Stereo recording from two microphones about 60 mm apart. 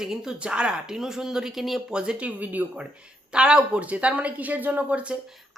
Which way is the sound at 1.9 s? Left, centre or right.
Centre.